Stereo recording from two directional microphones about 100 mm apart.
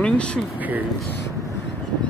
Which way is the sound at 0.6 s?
15° right (ahead or behind).